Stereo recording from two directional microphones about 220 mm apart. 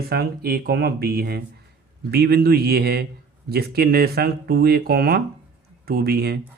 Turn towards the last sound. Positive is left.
turn(degrees=-45)  # may be behind; listen again after turning